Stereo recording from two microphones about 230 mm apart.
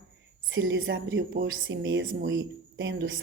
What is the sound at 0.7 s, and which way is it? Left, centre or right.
Speech, right.